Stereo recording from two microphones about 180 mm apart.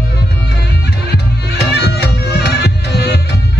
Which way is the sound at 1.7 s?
65° left (ahead or behind).